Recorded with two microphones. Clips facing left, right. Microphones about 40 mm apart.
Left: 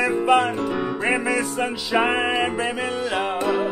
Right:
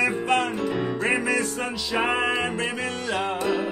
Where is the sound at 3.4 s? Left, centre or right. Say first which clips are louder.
Left 5 dB; left.